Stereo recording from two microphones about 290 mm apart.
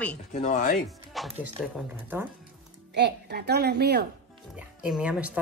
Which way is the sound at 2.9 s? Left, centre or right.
Right.